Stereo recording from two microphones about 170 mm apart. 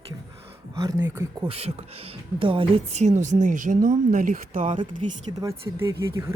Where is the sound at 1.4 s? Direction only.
35° right (ahead or behind); by 4.8 s 50° right (ahead or behind).